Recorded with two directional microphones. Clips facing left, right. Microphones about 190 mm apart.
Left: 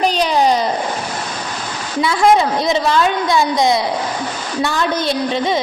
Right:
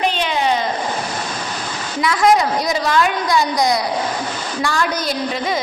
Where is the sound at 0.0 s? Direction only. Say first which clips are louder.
Left 4 dB; 40° left (ahead or behind).